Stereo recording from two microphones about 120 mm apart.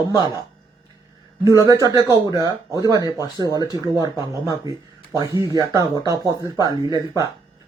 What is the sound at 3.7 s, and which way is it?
Speech, 30° right (ahead or behind).